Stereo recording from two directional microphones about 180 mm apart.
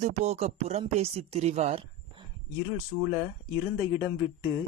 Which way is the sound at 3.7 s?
15° right (ahead or behind).